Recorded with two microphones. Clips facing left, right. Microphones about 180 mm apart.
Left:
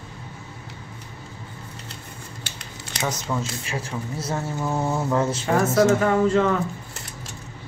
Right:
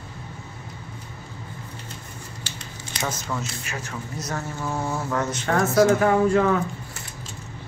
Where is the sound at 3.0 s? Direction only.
20° left (ahead or behind).